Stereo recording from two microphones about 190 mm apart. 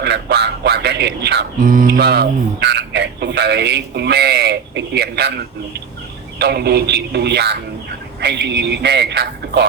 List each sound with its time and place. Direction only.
0.0 s speech: 60° right (ahead or behind)
6.4 s a man's voice: 60° right (ahead or behind)